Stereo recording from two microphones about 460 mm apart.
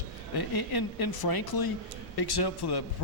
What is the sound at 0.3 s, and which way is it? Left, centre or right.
Speech, left.